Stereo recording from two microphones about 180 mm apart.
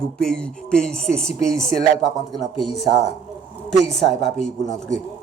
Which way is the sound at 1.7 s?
35° left (ahead or behind).